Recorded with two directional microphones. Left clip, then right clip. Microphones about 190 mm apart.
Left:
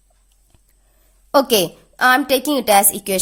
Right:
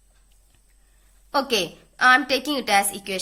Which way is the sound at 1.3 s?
70° left (ahead or behind).